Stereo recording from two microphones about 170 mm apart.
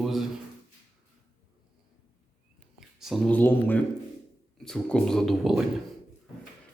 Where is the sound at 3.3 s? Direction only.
10° left (ahead or behind).